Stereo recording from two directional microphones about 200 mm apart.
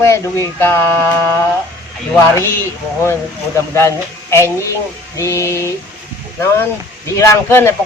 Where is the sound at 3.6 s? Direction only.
15° left (ahead or behind).